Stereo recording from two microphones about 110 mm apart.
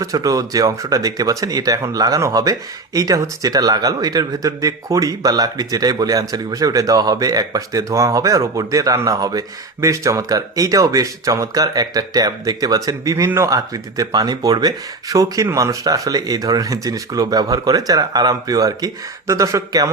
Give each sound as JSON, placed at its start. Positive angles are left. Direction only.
{"t": 0.0, "sound": "speech", "side_deg": -30}